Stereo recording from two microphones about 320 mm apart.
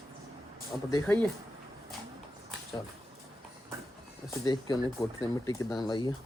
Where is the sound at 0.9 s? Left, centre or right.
Centre.